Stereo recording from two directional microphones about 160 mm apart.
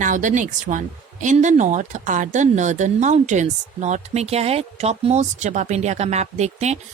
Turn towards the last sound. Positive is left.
turn(degrees=-45)  # may be behind; listen again after turning